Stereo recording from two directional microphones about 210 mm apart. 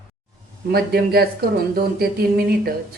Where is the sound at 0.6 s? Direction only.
50° right (ahead or behind).